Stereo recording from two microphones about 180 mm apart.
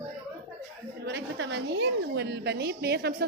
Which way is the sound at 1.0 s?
75° right (ahead or behind).